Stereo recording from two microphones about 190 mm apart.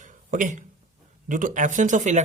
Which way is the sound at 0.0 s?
45° right (ahead or behind).